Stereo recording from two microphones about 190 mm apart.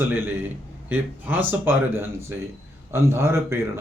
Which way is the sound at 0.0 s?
10° right (ahead or behind).